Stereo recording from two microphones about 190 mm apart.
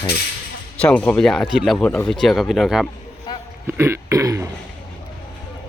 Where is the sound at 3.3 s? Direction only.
20° left (ahead or behind).